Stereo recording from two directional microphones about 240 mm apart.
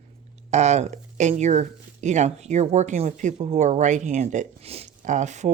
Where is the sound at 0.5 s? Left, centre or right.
Right.